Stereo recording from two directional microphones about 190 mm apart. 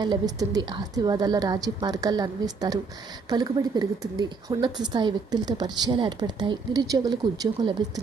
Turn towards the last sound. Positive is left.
turn(degrees=-20)  # may be behind; listen again after turning